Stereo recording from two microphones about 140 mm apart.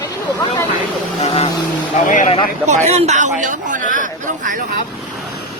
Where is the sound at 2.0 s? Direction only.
70° left (ahead or behind).